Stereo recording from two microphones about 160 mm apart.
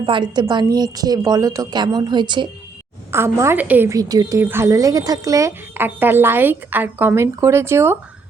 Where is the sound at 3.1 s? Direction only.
15° right (ahead or behind).